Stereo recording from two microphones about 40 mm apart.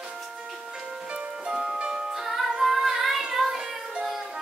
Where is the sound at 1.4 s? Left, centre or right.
Right.